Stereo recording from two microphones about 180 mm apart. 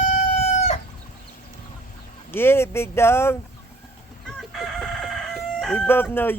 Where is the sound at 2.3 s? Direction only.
10° left (ahead or behind).